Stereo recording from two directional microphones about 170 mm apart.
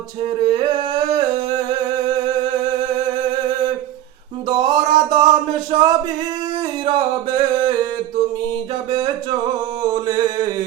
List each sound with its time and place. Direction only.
0.4 s humming: 25° right (ahead or behind)
4.4 s a sound: 25° right (ahead or behind)
9.8 s music: 20° right (ahead or behind)